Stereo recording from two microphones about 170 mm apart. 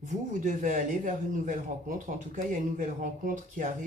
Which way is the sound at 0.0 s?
50° right (ahead or behind).